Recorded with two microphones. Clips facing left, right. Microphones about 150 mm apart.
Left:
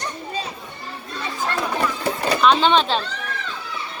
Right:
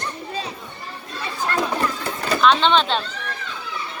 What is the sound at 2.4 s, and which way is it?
Speech, 5° left (ahead or behind).